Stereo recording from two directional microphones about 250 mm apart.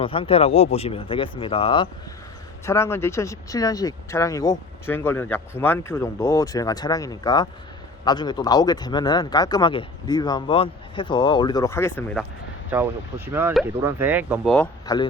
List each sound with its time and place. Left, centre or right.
0.0 s speech: left
2.6 s speech: centre
12.7 s speech: centre